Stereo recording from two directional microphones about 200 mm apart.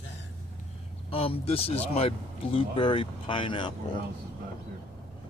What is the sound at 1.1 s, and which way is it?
Speech, 30° left (ahead or behind).